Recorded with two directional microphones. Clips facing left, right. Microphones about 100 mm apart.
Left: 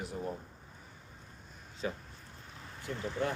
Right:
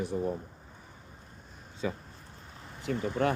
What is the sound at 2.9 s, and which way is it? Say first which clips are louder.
Speech: right 8 dB; 75° right (ahead or behind).